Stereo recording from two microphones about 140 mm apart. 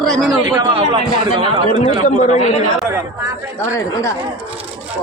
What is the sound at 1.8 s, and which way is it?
Speech, 55° left (ahead or behind).